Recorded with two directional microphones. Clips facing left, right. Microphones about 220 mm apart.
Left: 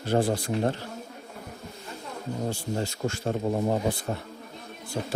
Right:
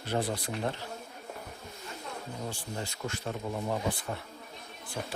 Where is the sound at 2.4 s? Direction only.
45° left (ahead or behind).